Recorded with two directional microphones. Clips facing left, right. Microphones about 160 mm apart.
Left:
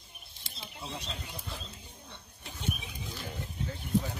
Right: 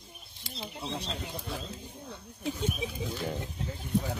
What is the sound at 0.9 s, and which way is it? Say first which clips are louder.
Speech: right 5 dB; 30° right (ahead or behind).